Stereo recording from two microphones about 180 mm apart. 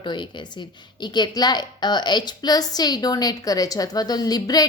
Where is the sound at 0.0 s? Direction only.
25° left (ahead or behind).